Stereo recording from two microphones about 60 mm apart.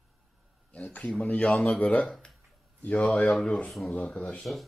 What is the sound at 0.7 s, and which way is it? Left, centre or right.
Speech, left.